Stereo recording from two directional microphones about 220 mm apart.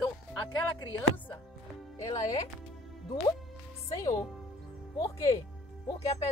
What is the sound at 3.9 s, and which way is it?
A woman's voice, 15° left (ahead or behind).